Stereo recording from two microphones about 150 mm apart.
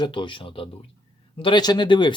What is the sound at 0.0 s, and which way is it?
Speech, 35° left (ahead or behind).